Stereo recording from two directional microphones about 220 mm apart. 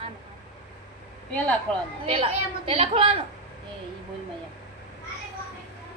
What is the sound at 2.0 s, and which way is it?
A woman's voice, 25° right (ahead or behind).